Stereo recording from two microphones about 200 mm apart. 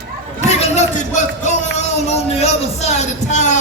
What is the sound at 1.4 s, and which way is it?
Speech, 35° left (ahead or behind).